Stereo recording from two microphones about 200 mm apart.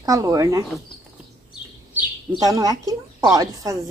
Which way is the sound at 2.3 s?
20° right (ahead or behind).